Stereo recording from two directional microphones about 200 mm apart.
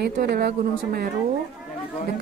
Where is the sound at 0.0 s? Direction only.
50° right (ahead or behind).